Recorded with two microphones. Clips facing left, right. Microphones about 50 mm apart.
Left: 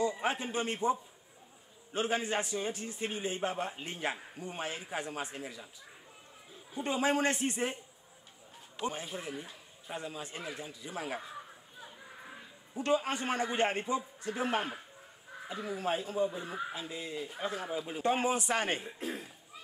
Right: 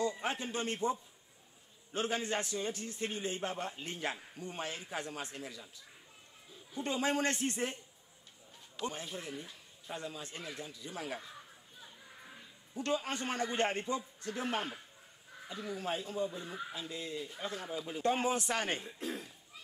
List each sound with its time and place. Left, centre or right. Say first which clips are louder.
0.0 s a man's voice: left 3 dB; centre
6.7 s a man's voice: left 3 dB; centre